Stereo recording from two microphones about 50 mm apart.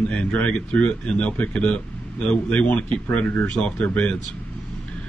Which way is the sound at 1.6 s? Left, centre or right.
Centre.